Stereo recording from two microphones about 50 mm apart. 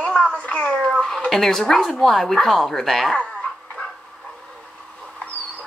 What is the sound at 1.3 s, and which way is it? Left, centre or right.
Speech, centre.